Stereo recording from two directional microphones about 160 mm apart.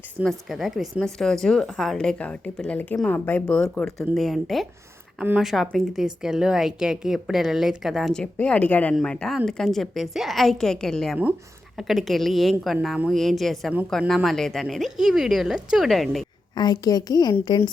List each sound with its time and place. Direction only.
0.3 s a woman's voice: centre (ahead or behind)
16.6 s a woman's voice: 25° left (ahead or behind)